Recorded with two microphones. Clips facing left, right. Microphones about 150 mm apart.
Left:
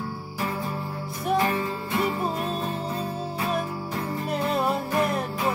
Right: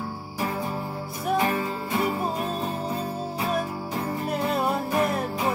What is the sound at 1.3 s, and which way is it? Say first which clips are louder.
Music: even; 15° right (ahead or behind).